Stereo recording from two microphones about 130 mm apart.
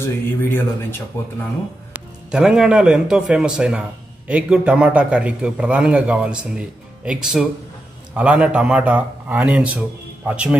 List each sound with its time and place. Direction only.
0.0 s speech: 20° left (ahead or behind)
2.0 s a man's voice: 5° right (ahead or behind)